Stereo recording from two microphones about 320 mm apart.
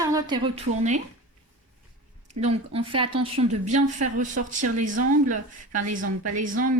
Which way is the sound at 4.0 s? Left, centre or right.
Right.